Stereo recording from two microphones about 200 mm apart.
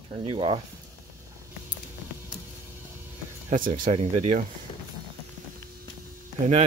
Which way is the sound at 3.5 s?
40° right (ahead or behind).